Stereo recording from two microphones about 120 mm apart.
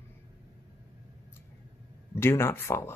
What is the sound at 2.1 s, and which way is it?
Speech, 20° left (ahead or behind).